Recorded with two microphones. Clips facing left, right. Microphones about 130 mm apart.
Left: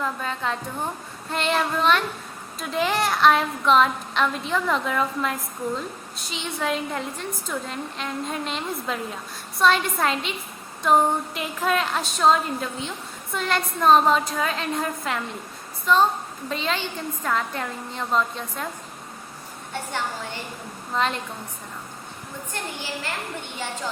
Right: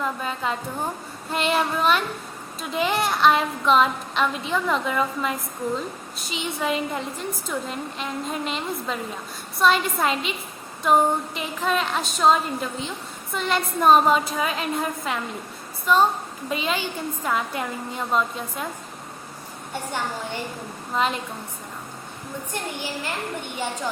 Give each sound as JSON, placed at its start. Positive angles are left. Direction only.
{"t": 0.0, "sound": "a woman's voice", "side_deg": -5}
{"t": 20.9, "sound": "a woman's voice", "side_deg": -5}
{"t": 22.5, "sound": "a woman's voice", "side_deg": -15}